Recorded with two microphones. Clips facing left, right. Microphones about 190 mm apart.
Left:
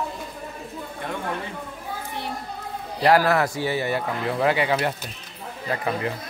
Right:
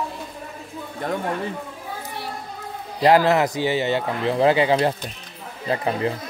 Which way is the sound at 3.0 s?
20° right (ahead or behind).